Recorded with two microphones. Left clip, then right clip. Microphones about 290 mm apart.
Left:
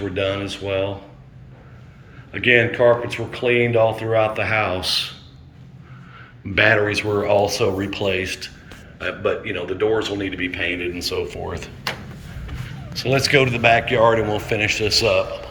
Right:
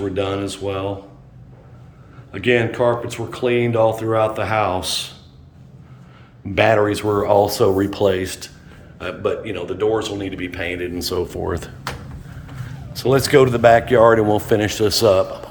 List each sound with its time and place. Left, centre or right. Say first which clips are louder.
0.1 s speech: even; centre
2.3 s speech: left 2 dB; centre
6.5 s speech: right 1 dB; centre
11.3 s speech: right 4 dB; right
12.9 s speech: right 2 dB; centre